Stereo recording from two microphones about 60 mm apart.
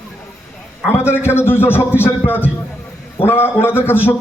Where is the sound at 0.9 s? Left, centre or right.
Left.